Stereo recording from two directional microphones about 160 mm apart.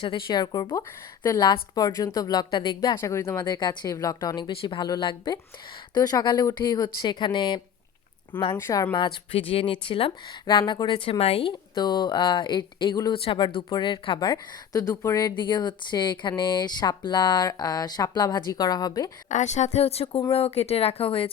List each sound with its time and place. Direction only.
0.0 s speech: 30° left (ahead or behind)
2.9 s speech: 15° left (ahead or behind)
8.5 s speech: 20° left (ahead or behind)
19.3 s speech: 45° left (ahead or behind)